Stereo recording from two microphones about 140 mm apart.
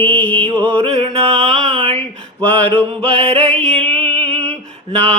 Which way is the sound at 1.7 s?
45° right (ahead or behind).